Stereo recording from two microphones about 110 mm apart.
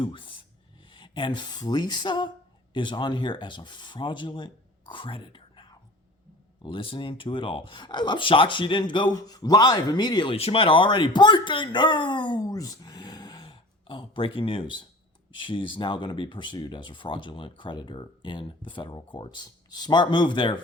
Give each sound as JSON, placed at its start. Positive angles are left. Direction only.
{"t": 0.0, "sound": "speech", "side_deg": 50}
{"t": 10.3, "sound": "speech", "side_deg": 60}
{"t": 13.4, "sound": "speech", "side_deg": 50}